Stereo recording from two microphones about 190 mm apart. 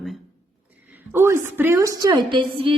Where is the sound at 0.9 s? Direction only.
10° right (ahead or behind).